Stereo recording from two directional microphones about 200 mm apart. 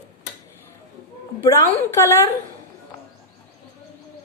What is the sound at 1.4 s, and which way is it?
Speech, 15° left (ahead or behind).